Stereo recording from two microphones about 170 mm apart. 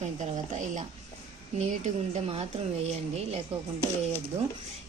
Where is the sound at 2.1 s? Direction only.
35° right (ahead or behind).